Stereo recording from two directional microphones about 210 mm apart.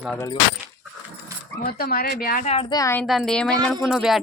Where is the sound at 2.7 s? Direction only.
15° left (ahead or behind).